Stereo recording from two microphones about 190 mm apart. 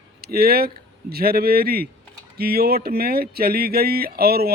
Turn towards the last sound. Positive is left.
turn(degrees=-55)  # may be behind; listen again after turning